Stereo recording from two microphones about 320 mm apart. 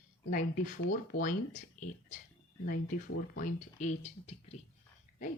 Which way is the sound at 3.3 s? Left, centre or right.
Left.